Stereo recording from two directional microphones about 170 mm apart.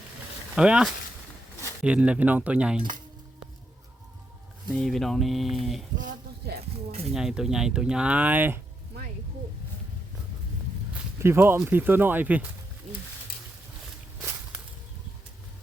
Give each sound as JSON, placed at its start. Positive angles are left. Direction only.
{"t": 0.5, "sound": "speech", "side_deg": -5}
{"t": 4.7, "sound": "speech", "side_deg": 0}
{"t": 6.0, "sound": "a sound", "side_deg": -50}
{"t": 7.1, "sound": "speech", "side_deg": 0}
{"t": 10.9, "sound": "speech", "side_deg": -15}